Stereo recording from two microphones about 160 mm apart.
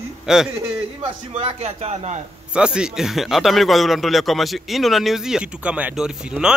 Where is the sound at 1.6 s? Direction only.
40° right (ahead or behind).